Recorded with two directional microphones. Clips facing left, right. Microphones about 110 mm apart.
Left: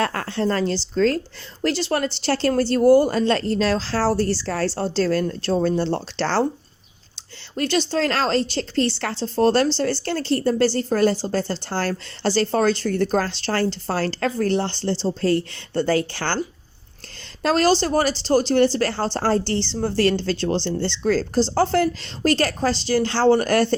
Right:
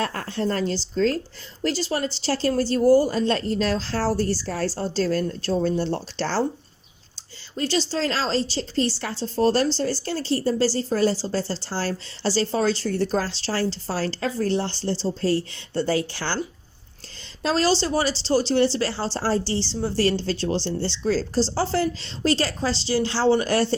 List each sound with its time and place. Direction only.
0.0 s a woman's voice: 80° left
1.6 s speech: 70° left (ahead or behind)
7.5 s speech: 60° left (ahead or behind)
17.4 s speech: 55° left (ahead or behind)